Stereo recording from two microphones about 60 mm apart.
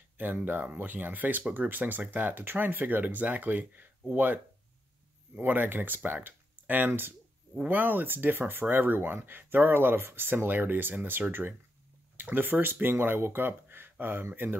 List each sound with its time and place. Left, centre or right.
0.5 s speech: right